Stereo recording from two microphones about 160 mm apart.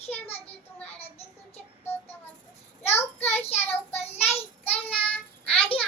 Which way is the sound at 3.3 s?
40° left (ahead or behind).